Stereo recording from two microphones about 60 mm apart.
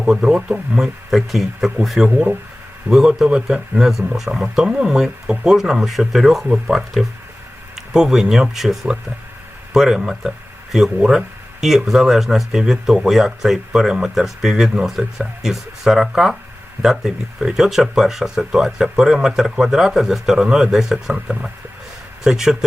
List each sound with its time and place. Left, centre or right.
0.0 s speech: centre
0.8 s speech: centre
2.9 s a man's voice: right; by 22.5 s centre